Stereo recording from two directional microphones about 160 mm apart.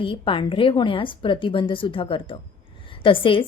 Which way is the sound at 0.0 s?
35° left (ahead or behind).